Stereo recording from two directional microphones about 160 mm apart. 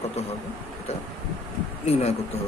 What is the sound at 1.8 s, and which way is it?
Speech, 40° left (ahead or behind).